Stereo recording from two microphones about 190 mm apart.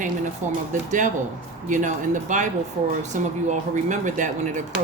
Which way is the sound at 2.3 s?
40° right (ahead or behind).